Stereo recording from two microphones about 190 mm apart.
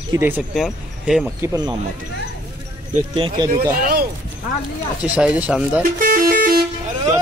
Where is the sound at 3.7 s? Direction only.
50° right (ahead or behind).